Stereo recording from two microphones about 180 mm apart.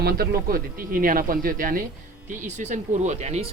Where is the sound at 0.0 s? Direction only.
60° right (ahead or behind).